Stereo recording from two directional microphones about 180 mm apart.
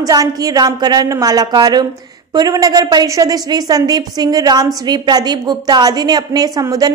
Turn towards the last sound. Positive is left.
turn(degrees=-20)  # may be behind; listen again after turning